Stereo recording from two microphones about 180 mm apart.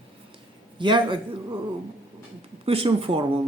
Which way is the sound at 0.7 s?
25° right (ahead or behind).